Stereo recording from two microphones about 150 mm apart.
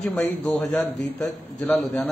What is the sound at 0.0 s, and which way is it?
A man's voice, 5° left (ahead or behind).